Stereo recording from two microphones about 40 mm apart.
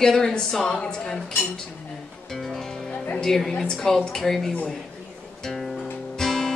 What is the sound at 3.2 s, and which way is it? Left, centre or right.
A woman's voice, centre.